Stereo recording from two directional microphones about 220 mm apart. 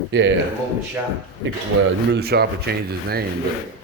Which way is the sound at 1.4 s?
55° right (ahead or behind).